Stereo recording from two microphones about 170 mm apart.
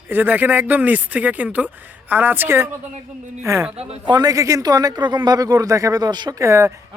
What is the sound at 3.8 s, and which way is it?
Speech, 30° right (ahead or behind).